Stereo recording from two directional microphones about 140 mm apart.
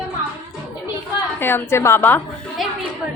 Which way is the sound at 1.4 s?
15° left (ahead or behind).